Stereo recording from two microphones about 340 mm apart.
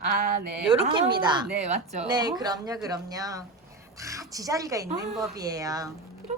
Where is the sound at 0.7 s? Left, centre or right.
Centre.